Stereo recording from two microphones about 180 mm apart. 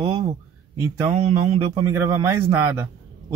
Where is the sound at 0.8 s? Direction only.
15° right (ahead or behind).